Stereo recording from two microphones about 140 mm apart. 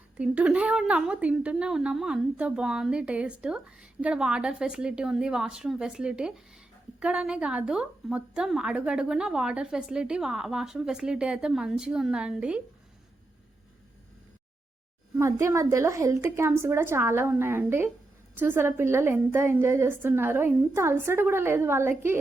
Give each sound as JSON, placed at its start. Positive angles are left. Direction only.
{"t": 0.2, "sound": "a woman's voice", "side_deg": -10}
{"t": 15.2, "sound": "a woman's voice", "side_deg": -20}